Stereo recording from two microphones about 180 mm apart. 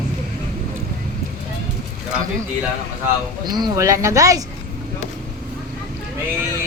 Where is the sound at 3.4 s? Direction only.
20° right (ahead or behind).